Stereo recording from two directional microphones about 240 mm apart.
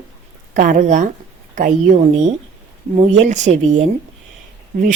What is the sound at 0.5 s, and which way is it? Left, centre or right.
Speech, right.